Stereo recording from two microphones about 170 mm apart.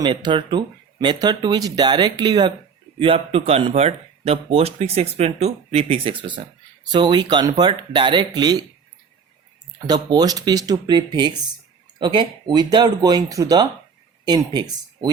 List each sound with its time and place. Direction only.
0.0 s speech: 30° right (ahead or behind)
9.7 s speech: 25° right (ahead or behind)